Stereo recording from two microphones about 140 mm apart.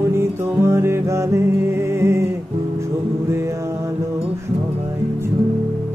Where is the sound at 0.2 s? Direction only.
20° right (ahead or behind).